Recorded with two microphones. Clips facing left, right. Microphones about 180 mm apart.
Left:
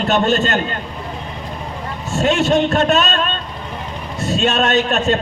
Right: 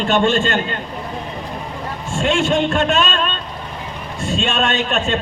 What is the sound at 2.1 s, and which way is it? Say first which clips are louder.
A man's voice: left 2 dB; 40° left (ahead or behind).